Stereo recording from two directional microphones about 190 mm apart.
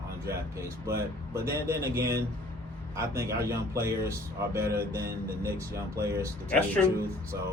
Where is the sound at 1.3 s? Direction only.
15° right (ahead or behind).